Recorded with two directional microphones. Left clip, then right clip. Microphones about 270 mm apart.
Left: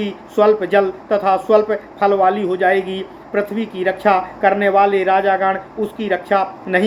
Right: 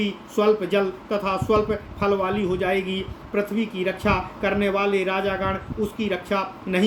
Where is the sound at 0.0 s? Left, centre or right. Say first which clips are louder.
Left 7 dB; right.